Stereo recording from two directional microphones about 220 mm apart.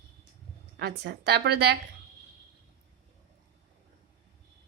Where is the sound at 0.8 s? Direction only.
45° right (ahead or behind).